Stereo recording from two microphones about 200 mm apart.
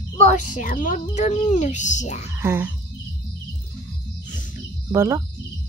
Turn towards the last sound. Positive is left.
turn(degrees=-15)  # may be behind; listen again after turning